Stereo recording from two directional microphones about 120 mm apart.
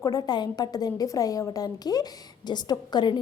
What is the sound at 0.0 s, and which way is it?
A woman's voice, 35° left (ahead or behind).